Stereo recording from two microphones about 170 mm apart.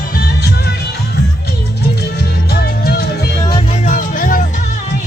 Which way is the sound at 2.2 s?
65° left (ahead or behind).